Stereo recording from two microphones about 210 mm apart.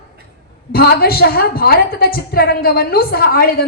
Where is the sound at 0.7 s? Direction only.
45° left (ahead or behind).